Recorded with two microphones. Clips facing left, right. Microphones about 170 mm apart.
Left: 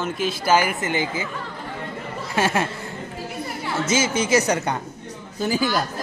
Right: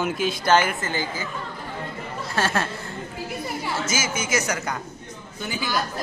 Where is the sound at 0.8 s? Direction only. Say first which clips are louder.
Left 4 dB; 20° left (ahead or behind).